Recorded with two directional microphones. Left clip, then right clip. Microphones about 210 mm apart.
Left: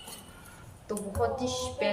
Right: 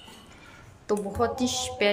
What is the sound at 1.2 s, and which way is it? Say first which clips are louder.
Speech: left 1 dB; 60° right (ahead or behind).